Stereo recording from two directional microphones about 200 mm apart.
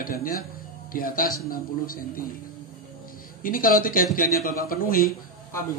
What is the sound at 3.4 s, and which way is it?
Speech, 45° left (ahead or behind).